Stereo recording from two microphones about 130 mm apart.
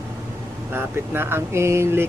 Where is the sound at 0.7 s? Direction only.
20° right (ahead or behind).